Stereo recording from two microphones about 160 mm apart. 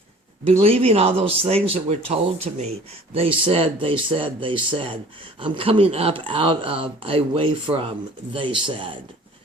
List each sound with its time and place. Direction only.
0.4 s speech: 40° right (ahead or behind)